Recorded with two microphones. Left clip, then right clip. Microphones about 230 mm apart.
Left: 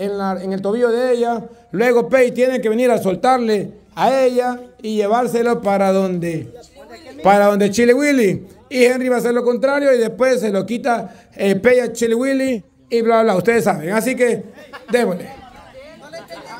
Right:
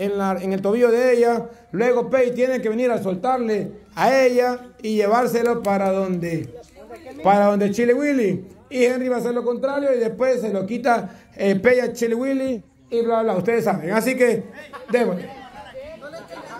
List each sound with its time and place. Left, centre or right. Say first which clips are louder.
0.0 s speech: left 1 dB; centre
1.7 s a man's voice: left 5 dB; left
3.9 s a man's voice: left 2 dB; centre; by 9.9 s left
9.9 s a man's voice: left 4 dB; left
10.8 s a man's voice: left 1 dB; centre